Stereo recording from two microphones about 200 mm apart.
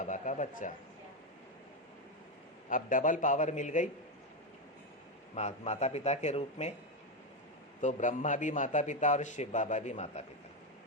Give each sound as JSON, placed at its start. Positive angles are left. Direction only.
{"t": 0.0, "sound": "a sound", "side_deg": 40}
{"t": 2.6, "sound": "a man's voice", "side_deg": 40}
{"t": 5.3, "sound": "a man's voice", "side_deg": 35}
{"t": 7.8, "sound": "a man's voice", "side_deg": 35}